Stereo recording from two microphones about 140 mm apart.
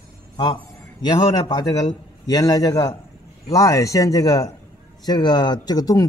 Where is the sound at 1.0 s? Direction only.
30° left (ahead or behind).